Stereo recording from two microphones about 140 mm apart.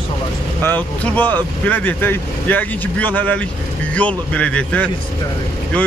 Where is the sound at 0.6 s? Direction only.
15° left (ahead or behind).